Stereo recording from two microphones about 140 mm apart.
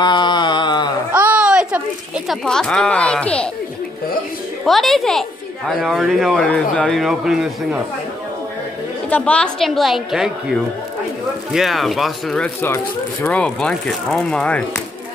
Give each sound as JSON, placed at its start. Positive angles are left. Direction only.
{"t": 0.0, "sound": "mantra", "side_deg": 35}
{"t": 1.1, "sound": "a sound", "side_deg": -10}
{"t": 2.2, "sound": "speech", "side_deg": 5}
{"t": 4.6, "sound": "speech", "side_deg": 0}
{"t": 9.1, "sound": "speech", "side_deg": 10}